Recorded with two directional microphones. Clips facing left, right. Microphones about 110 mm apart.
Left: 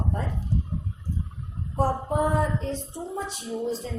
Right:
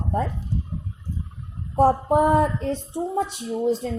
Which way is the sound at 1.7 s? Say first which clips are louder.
Right 7 dB; 60° right (ahead or behind).